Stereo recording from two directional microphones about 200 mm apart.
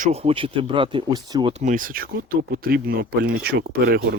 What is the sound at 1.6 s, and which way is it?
Speech, 45° right (ahead or behind).